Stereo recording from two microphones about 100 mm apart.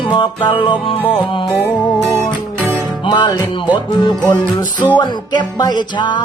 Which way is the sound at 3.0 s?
50° left (ahead or behind).